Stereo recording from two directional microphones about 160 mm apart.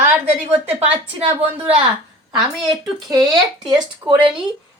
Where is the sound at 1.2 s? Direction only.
40° right (ahead or behind).